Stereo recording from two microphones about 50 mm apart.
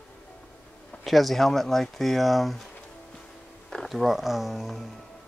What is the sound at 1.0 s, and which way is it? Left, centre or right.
Speech, centre.